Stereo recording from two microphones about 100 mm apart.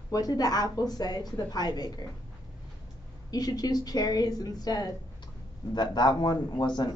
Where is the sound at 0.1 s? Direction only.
40° left (ahead or behind).